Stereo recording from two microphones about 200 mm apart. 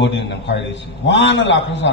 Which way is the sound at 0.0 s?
60° left (ahead or behind).